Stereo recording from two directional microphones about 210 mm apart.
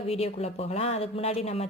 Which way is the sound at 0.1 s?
30° left (ahead or behind).